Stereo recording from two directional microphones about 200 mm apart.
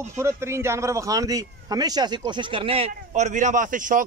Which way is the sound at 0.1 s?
15° right (ahead or behind).